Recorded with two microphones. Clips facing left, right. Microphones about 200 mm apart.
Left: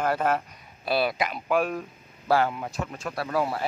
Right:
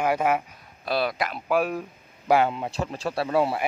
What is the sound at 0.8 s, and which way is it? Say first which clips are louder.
A man's voice: left 1 dB; 5° left (ahead or behind).